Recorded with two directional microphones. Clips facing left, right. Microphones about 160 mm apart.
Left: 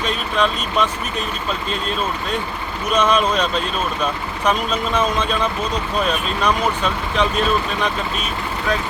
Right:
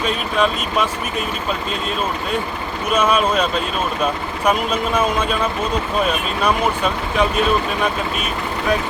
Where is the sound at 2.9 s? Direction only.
5° right (ahead or behind).